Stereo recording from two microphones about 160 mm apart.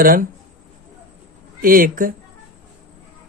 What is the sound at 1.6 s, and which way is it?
Speech, 60° right (ahead or behind).